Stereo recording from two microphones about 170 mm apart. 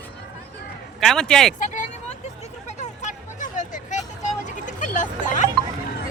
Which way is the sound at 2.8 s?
45° left (ahead or behind).